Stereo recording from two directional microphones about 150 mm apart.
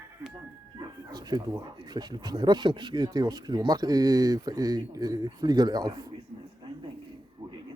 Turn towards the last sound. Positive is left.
turn(degrees=-25)  # may be behind; listen again after turning